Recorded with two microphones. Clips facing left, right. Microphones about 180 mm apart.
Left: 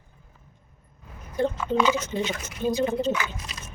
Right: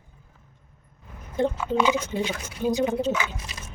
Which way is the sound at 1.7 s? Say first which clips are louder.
Even; 10° right (ahead or behind).